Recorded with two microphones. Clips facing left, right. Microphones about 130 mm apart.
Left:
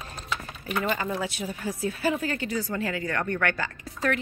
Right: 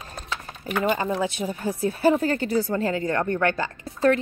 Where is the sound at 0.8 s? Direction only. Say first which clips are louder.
Right 6 dB; 25° right (ahead or behind).